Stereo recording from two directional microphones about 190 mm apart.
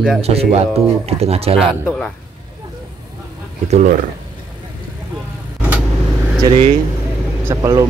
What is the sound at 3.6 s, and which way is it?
Speech, 40° right (ahead or behind).